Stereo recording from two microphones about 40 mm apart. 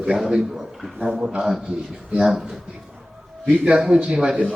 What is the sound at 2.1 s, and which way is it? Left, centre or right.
Speech, centre.